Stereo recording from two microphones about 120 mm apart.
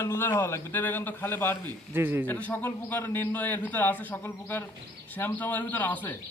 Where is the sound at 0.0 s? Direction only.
20° left (ahead or behind).